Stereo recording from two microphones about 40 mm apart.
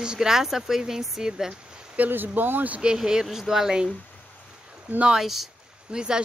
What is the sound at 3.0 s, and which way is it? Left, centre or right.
Speech, centre.